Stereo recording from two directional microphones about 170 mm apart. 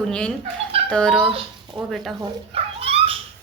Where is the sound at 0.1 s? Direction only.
5° left (ahead or behind).